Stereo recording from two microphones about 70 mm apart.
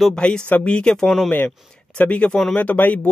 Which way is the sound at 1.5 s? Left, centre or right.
Centre.